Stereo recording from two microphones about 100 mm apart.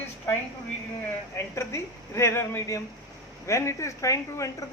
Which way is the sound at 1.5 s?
30° left (ahead or behind).